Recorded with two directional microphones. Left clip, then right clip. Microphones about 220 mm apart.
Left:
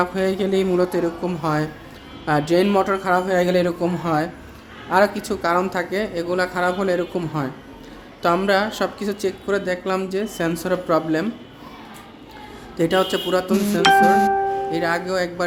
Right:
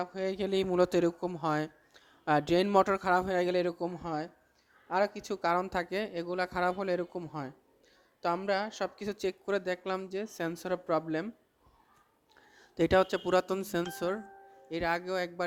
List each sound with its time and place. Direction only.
0.0 s speech: 25° right (ahead or behind)
12.7 s speech: 40° right (ahead or behind)